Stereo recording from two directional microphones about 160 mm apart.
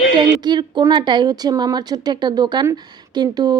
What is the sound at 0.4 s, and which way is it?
Speech, 25° right (ahead or behind).